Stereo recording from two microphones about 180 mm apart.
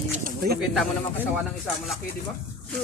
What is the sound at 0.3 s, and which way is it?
Bird, 60° right (ahead or behind).